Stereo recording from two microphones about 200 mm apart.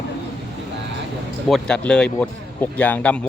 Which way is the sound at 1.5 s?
5° left (ahead or behind).